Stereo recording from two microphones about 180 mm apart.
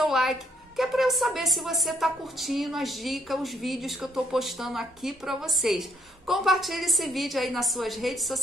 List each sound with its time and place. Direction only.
0.0 s a woman's voice: centre (ahead or behind)